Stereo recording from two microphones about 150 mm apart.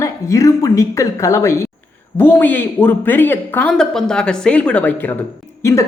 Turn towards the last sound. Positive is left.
turn(degrees=20)  # may be behind; listen again after turning